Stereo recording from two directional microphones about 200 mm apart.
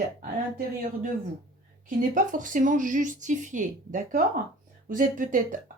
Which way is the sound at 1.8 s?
40° right (ahead or behind).